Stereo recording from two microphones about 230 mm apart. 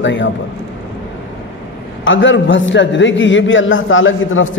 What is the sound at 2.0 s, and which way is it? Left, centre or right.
A man's voice, left.